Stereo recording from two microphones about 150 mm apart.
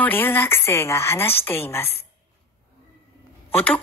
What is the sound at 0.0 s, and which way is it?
A woman's voice, 15° left (ahead or behind).